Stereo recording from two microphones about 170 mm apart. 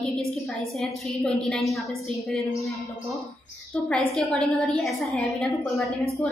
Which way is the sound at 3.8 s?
5° left (ahead or behind).